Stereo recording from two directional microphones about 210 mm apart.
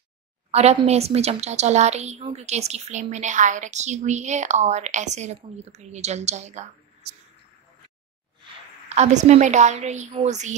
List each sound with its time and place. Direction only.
0.5 s a woman's voice: 30° right (ahead or behind)
8.8 s a woman's voice: 30° right (ahead or behind)